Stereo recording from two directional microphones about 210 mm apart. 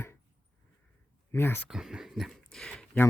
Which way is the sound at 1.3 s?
10° left (ahead or behind).